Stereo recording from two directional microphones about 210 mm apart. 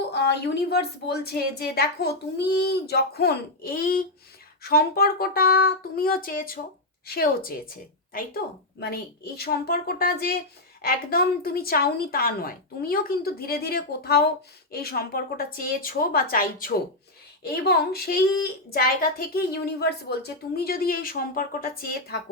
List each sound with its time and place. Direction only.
0.6 s speech: 50° left (ahead or behind)